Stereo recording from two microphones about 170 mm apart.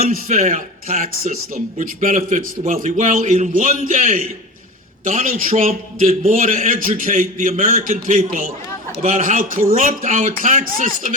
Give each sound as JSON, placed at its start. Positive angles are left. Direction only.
{"t": 0.0, "sound": "a man's voice", "side_deg": -50}